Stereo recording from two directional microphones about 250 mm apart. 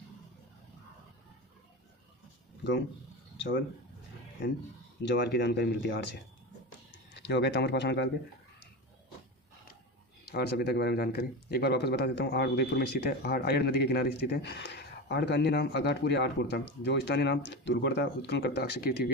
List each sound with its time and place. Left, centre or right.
5.0 s speech: left
7.2 s speech: left
10.3 s speech: left